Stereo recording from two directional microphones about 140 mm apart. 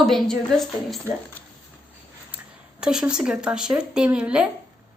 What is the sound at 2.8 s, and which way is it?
Speech, 5° right (ahead or behind).